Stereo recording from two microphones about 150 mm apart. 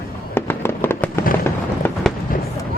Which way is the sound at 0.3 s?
15° left (ahead or behind).